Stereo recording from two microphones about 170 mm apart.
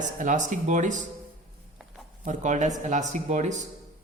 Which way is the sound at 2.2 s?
45° right (ahead or behind).